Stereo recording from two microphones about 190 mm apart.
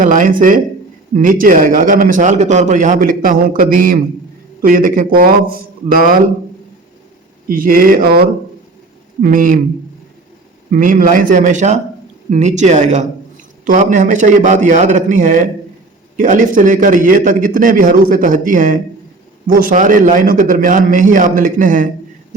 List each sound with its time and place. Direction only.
0.0 s a man's voice: 40° right (ahead or behind)
7.4 s a man's voice: 50° right (ahead or behind)
10.7 s a man's voice: 45° right (ahead or behind)